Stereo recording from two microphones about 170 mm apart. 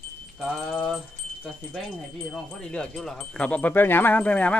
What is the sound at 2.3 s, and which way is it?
Speech, centre (ahead or behind).